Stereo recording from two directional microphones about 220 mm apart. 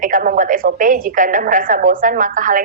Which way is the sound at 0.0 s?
40° right (ahead or behind).